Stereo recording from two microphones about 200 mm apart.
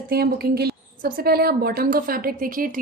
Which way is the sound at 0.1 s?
50° right (ahead or behind).